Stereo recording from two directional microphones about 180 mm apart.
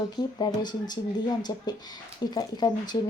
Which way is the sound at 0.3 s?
25° left (ahead or behind).